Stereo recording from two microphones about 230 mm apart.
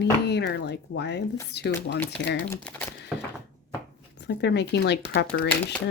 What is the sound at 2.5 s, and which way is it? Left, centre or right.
Speech, centre.